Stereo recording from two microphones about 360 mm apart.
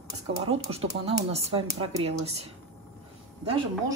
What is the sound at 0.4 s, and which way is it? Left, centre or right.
A woman's voice, centre.